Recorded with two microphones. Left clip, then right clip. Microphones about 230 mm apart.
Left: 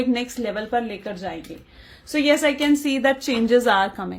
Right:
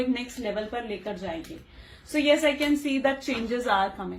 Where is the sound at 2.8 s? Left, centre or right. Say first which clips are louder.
Left 5 dB; left.